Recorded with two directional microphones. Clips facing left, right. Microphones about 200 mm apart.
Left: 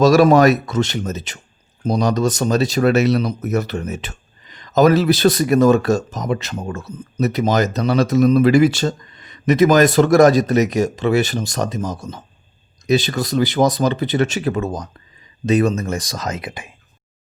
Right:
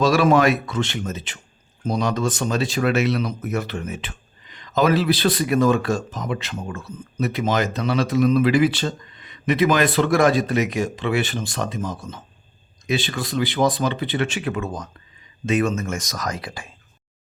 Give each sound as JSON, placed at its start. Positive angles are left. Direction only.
{"t": 0.0, "sound": "speech", "side_deg": 40}